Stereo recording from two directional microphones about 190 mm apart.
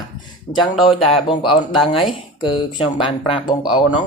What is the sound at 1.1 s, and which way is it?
Speech, 25° left (ahead or behind).